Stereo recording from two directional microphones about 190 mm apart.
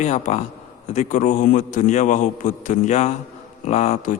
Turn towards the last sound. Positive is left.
turn(degrees=40)  # may be behind; listen again after turning